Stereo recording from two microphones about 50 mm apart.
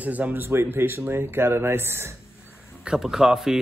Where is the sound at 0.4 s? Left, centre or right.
Right.